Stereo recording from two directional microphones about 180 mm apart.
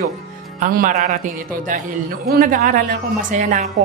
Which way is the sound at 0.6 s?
50° right (ahead or behind).